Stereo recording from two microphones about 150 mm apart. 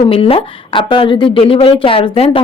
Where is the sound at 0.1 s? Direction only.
40° left (ahead or behind).